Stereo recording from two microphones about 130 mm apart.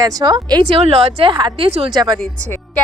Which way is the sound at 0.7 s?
50° right (ahead or behind).